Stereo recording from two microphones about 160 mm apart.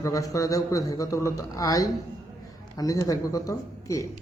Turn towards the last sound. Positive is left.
turn(degrees=20)  # may be behind; listen again after turning